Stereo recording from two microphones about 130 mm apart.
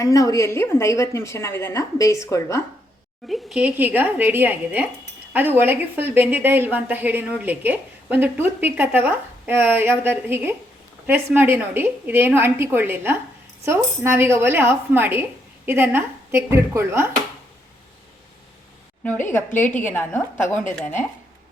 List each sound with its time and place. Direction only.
0.0 s a woman's voice: 25° left (ahead or behind)
3.2 s a woman's voice: centre (ahead or behind)
3.6 s a woman's voice: 10° right (ahead or behind)
19.3 s a woman's voice: 15° left (ahead or behind)